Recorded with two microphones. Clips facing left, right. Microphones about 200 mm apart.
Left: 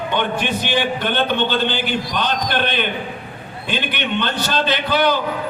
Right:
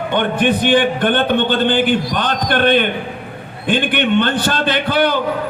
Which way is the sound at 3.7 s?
55° right (ahead or behind).